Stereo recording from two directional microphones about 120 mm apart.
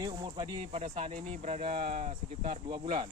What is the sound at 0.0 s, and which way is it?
Speech, 35° right (ahead or behind).